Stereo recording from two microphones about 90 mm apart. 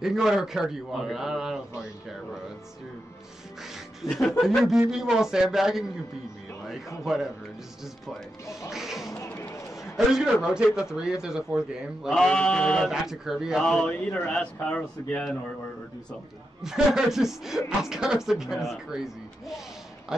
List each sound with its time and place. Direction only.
0.0 s speech: 5° right (ahead or behind)
4.0 s speech: centre (ahead or behind)
8.6 s speech: 5° right (ahead or behind)
9.3 s a sound: 25° left (ahead or behind)
9.9 s a man's voice: 5° right (ahead or behind)
12.1 s a man's voice: 10° left (ahead or behind)
13.0 s speech: 5° right (ahead or behind)
13.6 s a man's voice: 5° left (ahead or behind)
16.6 s speech: 5° right (ahead or behind)